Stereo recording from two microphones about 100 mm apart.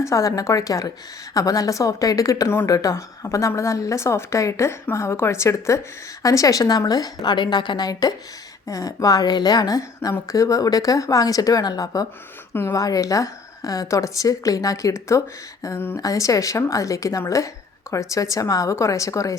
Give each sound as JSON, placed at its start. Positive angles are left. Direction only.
{"t": 0.0, "sound": "a woman's voice", "side_deg": 35}
{"t": 16.0, "sound": "a woman's voice", "side_deg": 35}